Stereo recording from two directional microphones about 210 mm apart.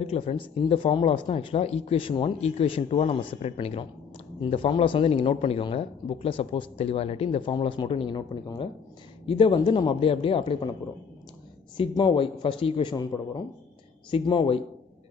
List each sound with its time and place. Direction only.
0.0 s speech: 30° left (ahead or behind)
11.7 s speech: 20° left (ahead or behind)